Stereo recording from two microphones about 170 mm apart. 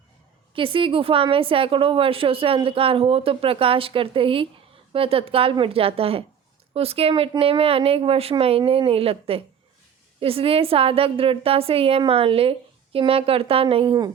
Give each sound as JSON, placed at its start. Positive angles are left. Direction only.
{"t": 0.5, "sound": "a woman's voice", "side_deg": -30}